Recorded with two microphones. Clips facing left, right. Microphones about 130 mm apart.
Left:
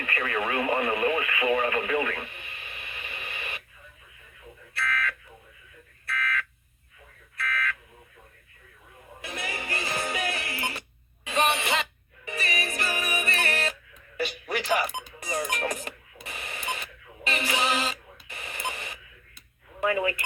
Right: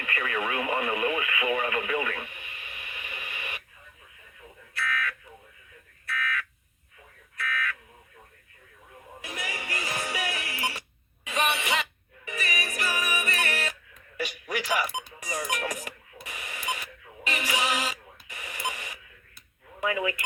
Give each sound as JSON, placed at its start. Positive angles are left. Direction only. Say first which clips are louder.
{"t": 0.0, "sound": "speech", "louder": "left 1 dB", "side_deg": 35}
{"t": 4.7, "sound": "a sound", "louder": "left 1 dB", "side_deg": 35}
{"t": 6.1, "sound": "fire alarm", "louder": "left 1 dB", "side_deg": 35}
{"t": 7.3, "sound": "buzzer", "louder": "left 1 dB", "side_deg": 35}
{"t": 9.2, "sound": "music", "louder": "left 2 dB", "side_deg": 30}
{"t": 19.8, "sound": "speech", "louder": "left 3 dB", "side_deg": 35}